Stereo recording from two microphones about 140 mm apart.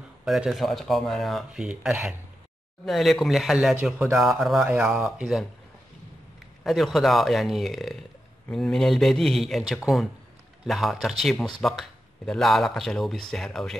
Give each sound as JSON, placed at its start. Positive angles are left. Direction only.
{"t": 0.2, "sound": "speech", "side_deg": -5}
{"t": 6.6, "sound": "speech", "side_deg": 0}